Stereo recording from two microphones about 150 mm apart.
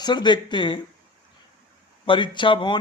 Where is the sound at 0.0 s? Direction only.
30° left (ahead or behind).